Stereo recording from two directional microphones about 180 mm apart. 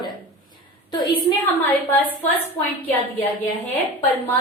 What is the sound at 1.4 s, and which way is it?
Speech, 10° left (ahead or behind).